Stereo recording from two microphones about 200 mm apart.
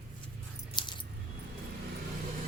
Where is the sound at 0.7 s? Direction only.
20° left (ahead or behind).